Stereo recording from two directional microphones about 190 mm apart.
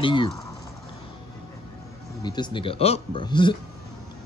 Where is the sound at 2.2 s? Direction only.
25° left (ahead or behind).